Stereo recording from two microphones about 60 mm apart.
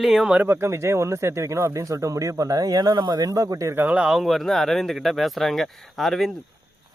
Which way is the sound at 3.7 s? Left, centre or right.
Right.